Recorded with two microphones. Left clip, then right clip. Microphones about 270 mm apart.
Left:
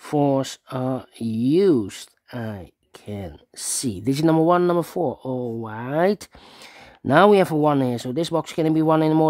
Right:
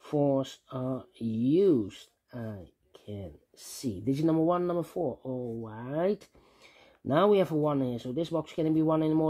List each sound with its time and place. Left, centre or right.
0.0 s speech: left